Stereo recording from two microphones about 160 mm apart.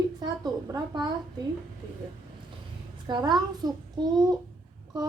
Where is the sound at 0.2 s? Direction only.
25° right (ahead or behind).